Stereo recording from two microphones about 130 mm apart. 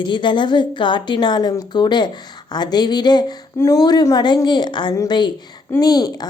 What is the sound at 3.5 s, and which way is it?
A woman's voice, 20° left (ahead or behind).